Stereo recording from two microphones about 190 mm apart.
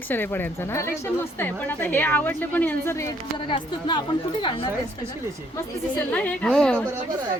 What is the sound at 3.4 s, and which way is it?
A woman's voice, 25° left (ahead or behind).